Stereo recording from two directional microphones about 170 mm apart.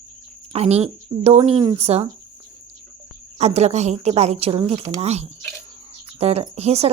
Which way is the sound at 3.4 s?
40° right (ahead or behind).